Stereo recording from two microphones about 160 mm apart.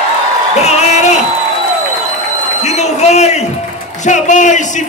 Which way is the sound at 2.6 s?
45° left (ahead or behind).